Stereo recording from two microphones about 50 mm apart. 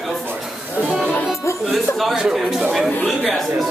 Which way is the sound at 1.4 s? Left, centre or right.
Left.